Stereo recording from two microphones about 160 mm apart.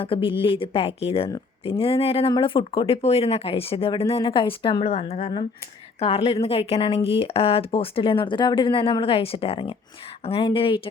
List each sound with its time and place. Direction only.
0.0 s a woman's voice: 35° left (ahead or behind)